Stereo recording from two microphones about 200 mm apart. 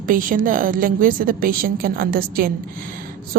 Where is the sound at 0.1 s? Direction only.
45° right (ahead or behind).